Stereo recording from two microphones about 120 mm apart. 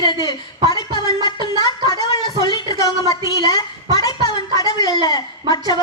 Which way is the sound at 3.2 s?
30° left (ahead or behind).